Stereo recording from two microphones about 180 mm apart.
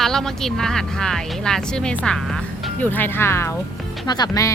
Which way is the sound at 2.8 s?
10° left (ahead or behind).